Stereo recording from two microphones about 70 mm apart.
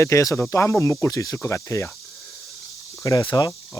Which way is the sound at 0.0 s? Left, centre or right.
Left.